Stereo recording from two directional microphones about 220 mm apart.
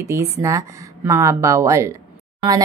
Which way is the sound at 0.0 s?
15° right (ahead or behind).